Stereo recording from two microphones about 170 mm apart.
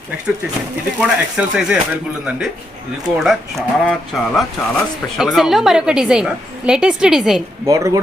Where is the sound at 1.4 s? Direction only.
5° right (ahead or behind).